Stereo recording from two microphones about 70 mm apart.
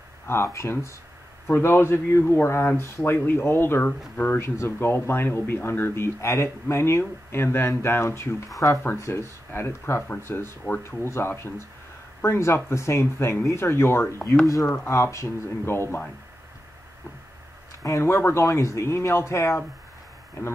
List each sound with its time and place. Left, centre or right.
0.3 s speech: left
17.8 s speech: left